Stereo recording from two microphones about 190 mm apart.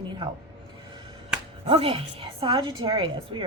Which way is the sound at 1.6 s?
30° right (ahead or behind).